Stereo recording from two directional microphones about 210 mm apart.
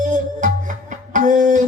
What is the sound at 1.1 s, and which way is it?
Music, 40° right (ahead or behind).